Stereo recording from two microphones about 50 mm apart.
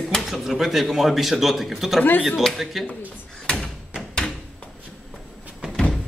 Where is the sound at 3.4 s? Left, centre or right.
Left.